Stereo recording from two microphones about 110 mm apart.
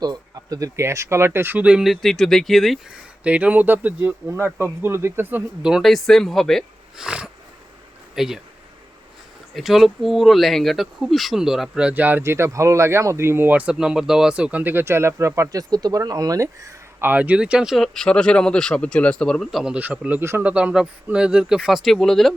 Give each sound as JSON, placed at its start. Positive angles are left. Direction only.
{"t": 0.0, "sound": "speech", "side_deg": -35}
{"t": 3.2, "sound": "speech", "side_deg": -15}
{"t": 5.6, "sound": "a man's voice", "side_deg": 0}
{"t": 9.6, "sound": "speech", "side_deg": 0}
{"t": 17.1, "sound": "speech", "side_deg": -15}
{"t": 17.7, "sound": "a man's voice", "side_deg": 5}